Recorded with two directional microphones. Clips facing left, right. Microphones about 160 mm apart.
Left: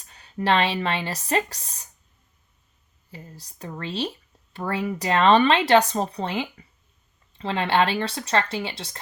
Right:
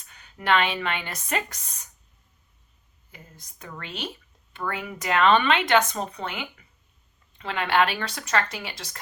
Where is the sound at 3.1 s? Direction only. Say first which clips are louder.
Left 7 dB; 35° left (ahead or behind).